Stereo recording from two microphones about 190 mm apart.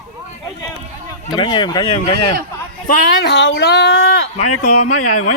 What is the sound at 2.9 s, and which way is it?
Speech, 65° left (ahead or behind).